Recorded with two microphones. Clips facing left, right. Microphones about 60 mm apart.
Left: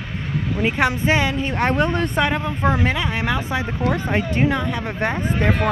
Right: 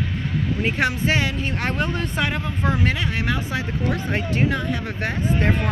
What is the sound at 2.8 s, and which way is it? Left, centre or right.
Speech, left.